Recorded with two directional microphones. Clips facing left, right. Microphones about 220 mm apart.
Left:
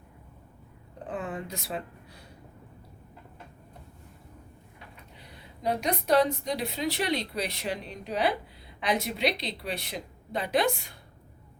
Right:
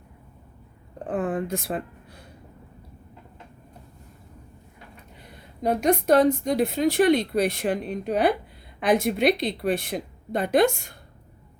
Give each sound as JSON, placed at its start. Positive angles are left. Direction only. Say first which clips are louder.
{"t": 1.0, "sound": "speech", "louder": "right 8 dB", "side_deg": -50}
{"t": 5.6, "sound": "speech", "louder": "right 7 dB", "side_deg": -50}